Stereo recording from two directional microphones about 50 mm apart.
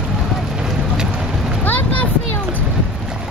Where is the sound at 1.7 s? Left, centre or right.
Left.